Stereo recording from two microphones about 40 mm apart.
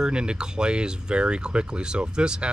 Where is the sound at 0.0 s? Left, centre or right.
Right.